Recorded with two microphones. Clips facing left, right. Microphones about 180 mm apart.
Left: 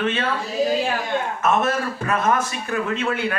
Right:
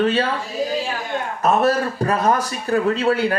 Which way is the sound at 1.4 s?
35° right (ahead or behind).